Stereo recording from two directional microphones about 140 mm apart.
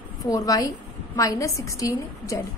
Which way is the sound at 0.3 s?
25° left (ahead or behind).